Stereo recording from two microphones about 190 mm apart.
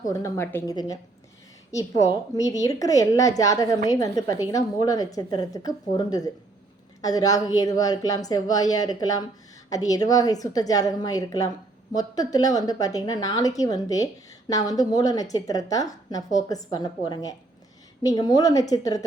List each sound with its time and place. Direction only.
0.0 s a woman's voice: 15° left (ahead or behind)